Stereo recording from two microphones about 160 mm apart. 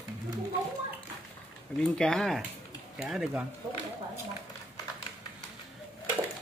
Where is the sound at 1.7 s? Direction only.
5° left (ahead or behind).